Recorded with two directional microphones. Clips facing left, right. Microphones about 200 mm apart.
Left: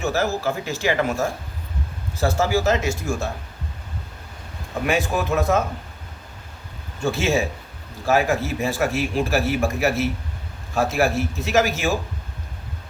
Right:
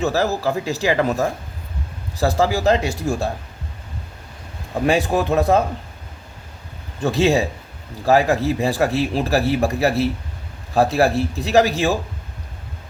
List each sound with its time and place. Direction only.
0.0 s speech: 35° right (ahead or behind)
4.7 s speech: 30° right (ahead or behind)
7.0 s speech: 35° right (ahead or behind)